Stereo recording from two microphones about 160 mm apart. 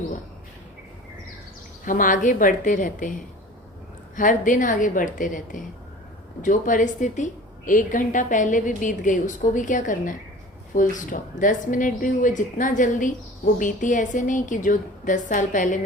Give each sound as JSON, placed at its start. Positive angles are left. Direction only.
{"t": 1.8, "sound": "a woman's voice", "side_deg": 55}
{"t": 4.1, "sound": "a woman's voice", "side_deg": 55}